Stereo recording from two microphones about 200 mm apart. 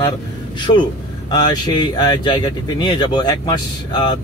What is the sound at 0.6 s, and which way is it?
Speech, 25° left (ahead or behind).